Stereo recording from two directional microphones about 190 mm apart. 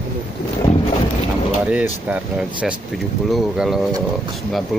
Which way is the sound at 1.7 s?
5° right (ahead or behind).